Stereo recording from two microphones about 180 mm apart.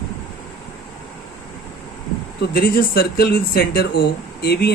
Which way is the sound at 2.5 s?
55° left (ahead or behind).